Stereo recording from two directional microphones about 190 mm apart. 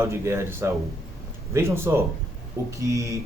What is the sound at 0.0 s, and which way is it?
Speech, 15° right (ahead or behind).